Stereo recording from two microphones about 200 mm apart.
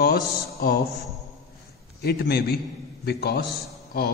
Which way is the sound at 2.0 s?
50° left (ahead or behind).